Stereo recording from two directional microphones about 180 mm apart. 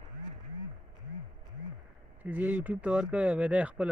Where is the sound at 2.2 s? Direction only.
10° right (ahead or behind).